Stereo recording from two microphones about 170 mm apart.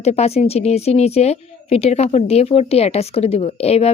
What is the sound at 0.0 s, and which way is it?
Speech, 40° left (ahead or behind).